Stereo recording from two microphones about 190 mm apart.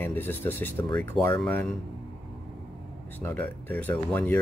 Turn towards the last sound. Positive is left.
turn(degrees=10)  # may be behind; listen again after turning